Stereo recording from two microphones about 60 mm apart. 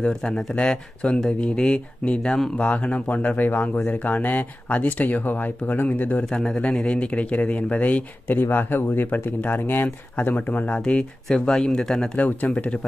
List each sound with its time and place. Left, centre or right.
0.1 s speech: centre
2.5 s speech: left
8.3 s speech: left
10.8 s speech: centre
12.2 s speech: left